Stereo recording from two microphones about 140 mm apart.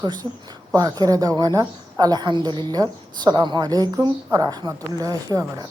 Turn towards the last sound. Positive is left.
turn(degrees=-25)  # may be behind; listen again after turning